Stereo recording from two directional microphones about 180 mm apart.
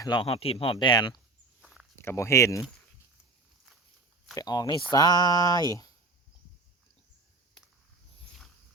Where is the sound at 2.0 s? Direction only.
15° left (ahead or behind).